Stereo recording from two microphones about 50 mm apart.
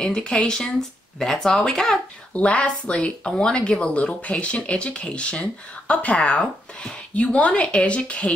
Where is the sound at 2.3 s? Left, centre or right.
Left.